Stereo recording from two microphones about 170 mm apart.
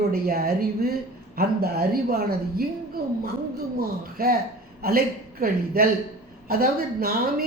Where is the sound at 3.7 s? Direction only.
60° right (ahead or behind).